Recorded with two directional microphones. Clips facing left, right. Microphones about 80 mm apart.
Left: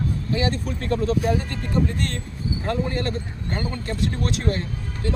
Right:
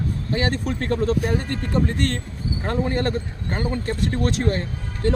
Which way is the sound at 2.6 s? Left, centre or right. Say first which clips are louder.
Right 3 dB; right.